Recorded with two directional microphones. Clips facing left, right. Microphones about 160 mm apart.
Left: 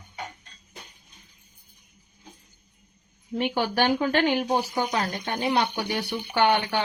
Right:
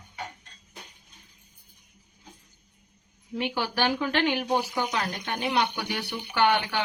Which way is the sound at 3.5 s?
50° left (ahead or behind).